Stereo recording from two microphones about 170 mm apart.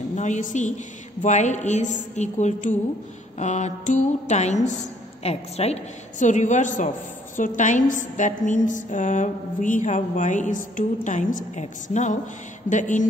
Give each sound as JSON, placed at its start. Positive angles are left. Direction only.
{"t": 0.1, "sound": "a woman's voice", "side_deg": 45}